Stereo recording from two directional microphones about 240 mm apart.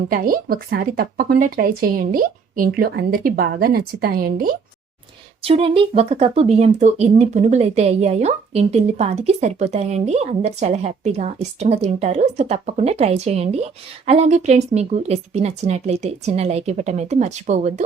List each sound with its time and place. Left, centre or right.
0.1 s speech: right
5.4 s speech: right